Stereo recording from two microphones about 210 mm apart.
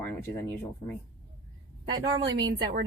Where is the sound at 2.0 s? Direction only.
20° right (ahead or behind).